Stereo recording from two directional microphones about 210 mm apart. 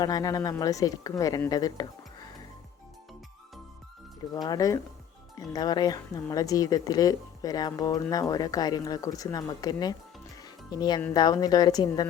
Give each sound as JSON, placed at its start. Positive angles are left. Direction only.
{"t": 0.0, "sound": "speech", "side_deg": 15}
{"t": 4.4, "sound": "a woman's voice", "side_deg": 15}